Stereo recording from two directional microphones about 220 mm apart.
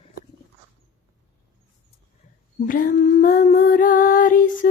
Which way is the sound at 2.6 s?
40° left (ahead or behind).